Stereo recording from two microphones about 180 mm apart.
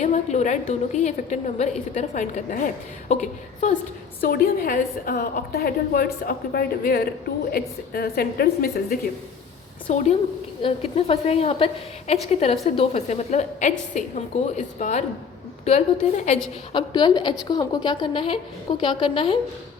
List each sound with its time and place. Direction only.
0.0 s a woman's voice: 40° left (ahead or behind)
4.2 s a woman's voice: 55° left (ahead or behind)
9.9 s a woman's voice: 40° left (ahead or behind)
16.7 s a woman's voice: 25° left (ahead or behind)